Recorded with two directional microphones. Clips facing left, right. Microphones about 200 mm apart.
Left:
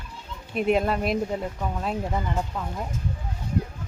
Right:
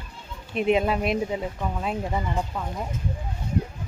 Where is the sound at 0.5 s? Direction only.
Centre (ahead or behind).